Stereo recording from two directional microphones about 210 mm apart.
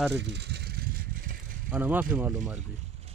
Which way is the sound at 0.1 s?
55° right (ahead or behind).